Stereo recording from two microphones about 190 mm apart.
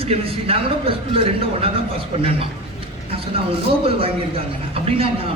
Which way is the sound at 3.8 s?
30° right (ahead or behind).